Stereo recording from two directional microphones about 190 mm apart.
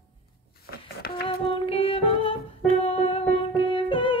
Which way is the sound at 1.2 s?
30° left (ahead or behind).